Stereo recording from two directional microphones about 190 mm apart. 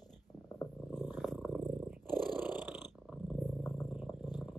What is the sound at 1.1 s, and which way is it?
Purr, centre (ahead or behind).